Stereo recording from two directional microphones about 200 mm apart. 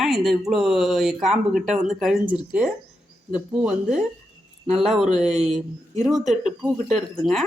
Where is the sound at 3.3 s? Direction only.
5° right (ahead or behind).